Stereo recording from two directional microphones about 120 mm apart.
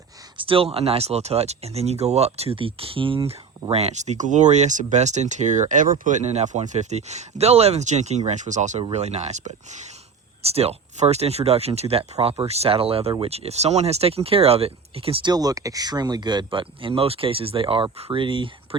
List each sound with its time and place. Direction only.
0.3 s speech: 50° right (ahead or behind); by 8.2 s 70° right (ahead or behind)
8.3 s speech: 85° right
8.9 s speech: 65° right (ahead or behind)
10.4 s speech: 60° right (ahead or behind)
15.3 s speech: 30° right (ahead or behind)